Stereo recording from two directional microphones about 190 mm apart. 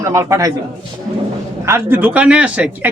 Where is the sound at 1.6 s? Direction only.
15° right (ahead or behind).